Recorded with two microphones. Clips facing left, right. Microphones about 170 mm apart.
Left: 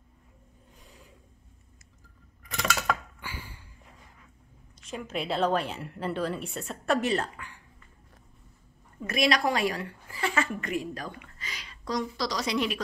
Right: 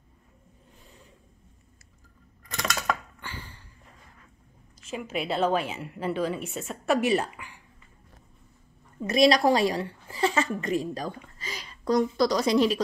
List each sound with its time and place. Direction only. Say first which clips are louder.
0.8 s filing: even; 5° left (ahead or behind)
2.5 s a sound: even; 5° left (ahead or behind)
4.8 s a woman's voice: right 2 dB; 5° right (ahead or behind)
9.1 s a woman's voice: right 6 dB; 35° right (ahead or behind); by 12.5 s 50° right (ahead or behind)
12.5 s a woman's voice: right 6 dB; 35° right (ahead or behind)